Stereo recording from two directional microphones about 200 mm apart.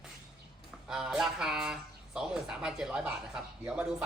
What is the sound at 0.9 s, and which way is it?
Speech, 5° right (ahead or behind).